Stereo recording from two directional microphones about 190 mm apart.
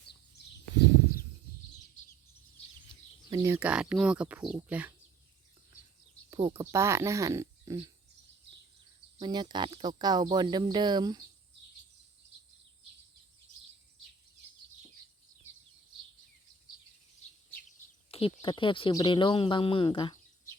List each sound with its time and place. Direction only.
3.2 s a sound: 25° right (ahead or behind)
3.5 s speech: 5° right (ahead or behind)
6.5 s speech: 15° right (ahead or behind)
9.2 s speech: 20° right (ahead or behind)
17.7 s speech: 30° left (ahead or behind)